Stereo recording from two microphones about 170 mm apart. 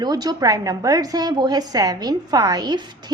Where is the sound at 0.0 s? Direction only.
25° right (ahead or behind).